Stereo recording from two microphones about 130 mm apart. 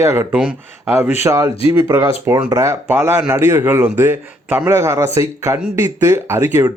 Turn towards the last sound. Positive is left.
turn(degrees=-20)  # may be behind; listen again after turning